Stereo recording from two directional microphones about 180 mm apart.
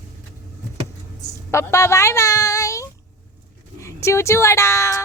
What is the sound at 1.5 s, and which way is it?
Speech, 15° left (ahead or behind).